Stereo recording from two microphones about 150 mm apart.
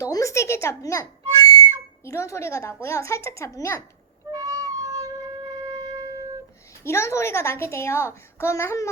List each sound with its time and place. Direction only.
0.0 s a sound: 20° left (ahead or behind)
2.0 s speech: 20° left (ahead or behind)
4.3 s wind instrument: 25° right (ahead or behind)
6.8 s a woman's voice: 20° left (ahead or behind)